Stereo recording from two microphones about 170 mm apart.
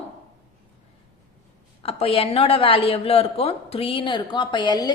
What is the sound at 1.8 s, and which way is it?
A woman's voice, 35° left (ahead or behind).